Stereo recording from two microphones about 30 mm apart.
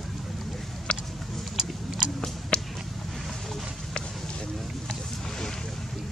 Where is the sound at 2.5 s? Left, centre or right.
Left.